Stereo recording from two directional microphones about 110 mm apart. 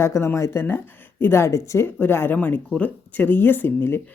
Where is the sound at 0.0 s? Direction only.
25° left (ahead or behind).